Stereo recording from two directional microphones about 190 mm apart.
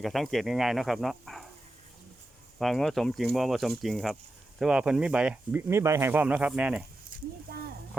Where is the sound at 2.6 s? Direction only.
Centre (ahead or behind).